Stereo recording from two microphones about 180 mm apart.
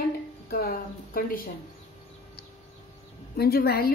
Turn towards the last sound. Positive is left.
turn(degrees=60)  # may be behind; listen again after turning